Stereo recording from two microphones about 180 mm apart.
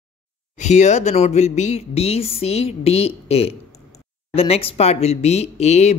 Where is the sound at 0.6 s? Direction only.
40° left (ahead or behind).